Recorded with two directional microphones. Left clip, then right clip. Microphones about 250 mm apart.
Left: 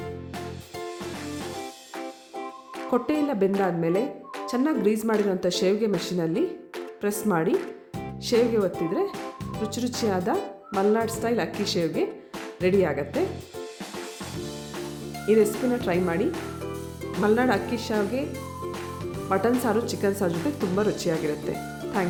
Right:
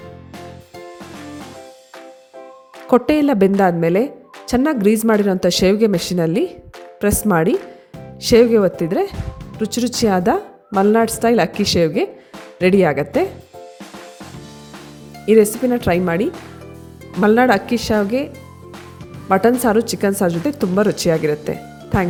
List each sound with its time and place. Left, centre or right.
2.9 s a woman's voice: right
15.3 s speech: right
19.3 s speech: right